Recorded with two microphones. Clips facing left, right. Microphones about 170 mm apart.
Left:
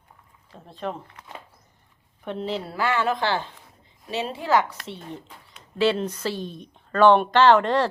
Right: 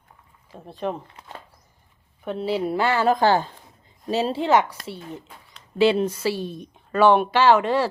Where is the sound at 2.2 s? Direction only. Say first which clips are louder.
Right 4 dB; 5° right (ahead or behind).